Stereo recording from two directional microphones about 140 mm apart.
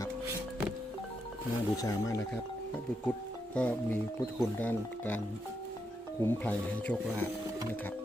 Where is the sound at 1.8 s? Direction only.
25° left (ahead or behind).